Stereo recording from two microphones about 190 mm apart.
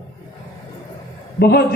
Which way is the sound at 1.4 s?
55° left (ahead or behind).